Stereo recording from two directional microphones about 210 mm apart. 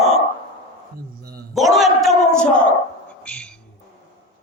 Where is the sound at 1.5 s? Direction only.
Centre (ahead or behind).